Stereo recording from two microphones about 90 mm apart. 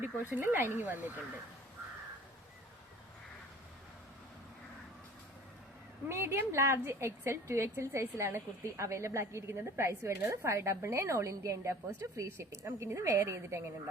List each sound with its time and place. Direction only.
0.0 s speech: 20° right (ahead or behind)
6.1 s a woman's voice: 30° right (ahead or behind)